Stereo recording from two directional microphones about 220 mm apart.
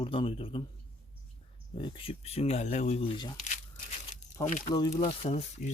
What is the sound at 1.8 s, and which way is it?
Speech, 20° left (ahead or behind).